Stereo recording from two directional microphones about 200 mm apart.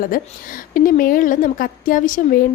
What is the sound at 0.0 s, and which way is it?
A woman's voice, 45° left (ahead or behind).